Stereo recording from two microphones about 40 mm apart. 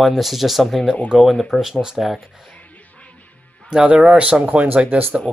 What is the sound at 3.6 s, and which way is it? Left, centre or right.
Speech, right.